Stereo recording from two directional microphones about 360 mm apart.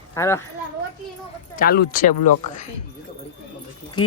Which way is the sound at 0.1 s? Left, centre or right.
Centre.